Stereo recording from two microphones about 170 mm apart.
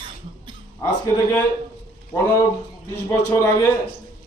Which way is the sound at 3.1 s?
20° left (ahead or behind).